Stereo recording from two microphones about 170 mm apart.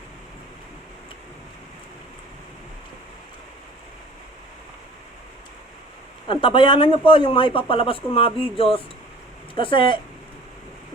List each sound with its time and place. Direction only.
6.2 s speech: 30° left (ahead or behind)